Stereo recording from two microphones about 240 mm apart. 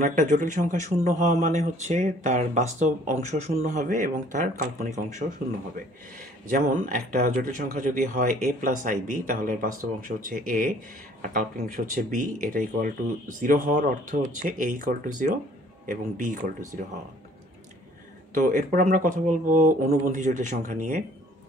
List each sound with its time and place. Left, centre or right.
0.0 s speech: right
6.4 s speech: right
18.3 s speech: right